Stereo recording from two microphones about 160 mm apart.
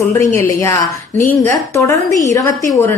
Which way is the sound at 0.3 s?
15° left (ahead or behind).